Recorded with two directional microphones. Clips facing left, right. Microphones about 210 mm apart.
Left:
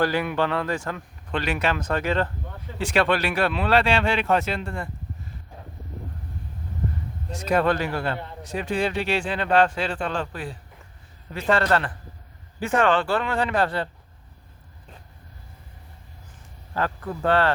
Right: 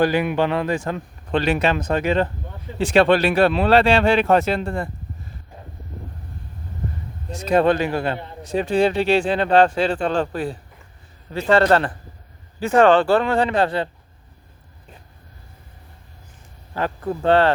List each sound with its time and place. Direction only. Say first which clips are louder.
0.0 s a man's voice: right 4 dB; 15° right (ahead or behind); by 4.9 s 35° right (ahead or behind)
7.3 s speech: right 5 dB; 25° right (ahead or behind)
16.8 s speech: right 4 dB; 25° right (ahead or behind)